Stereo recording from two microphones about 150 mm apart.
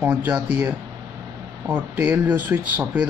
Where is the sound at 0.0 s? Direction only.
10° right (ahead or behind).